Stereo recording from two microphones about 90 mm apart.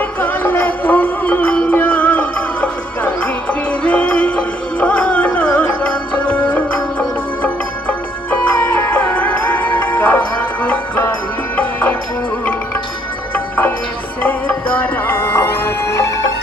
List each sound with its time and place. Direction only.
0.0 s music: 25° left (ahead or behind)
13.3 s music: 25° left (ahead or behind)